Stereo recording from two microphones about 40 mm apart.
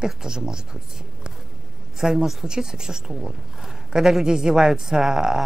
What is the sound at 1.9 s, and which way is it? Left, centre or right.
A man's voice, centre.